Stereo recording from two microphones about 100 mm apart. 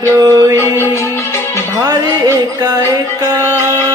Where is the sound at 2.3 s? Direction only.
35° right (ahead or behind).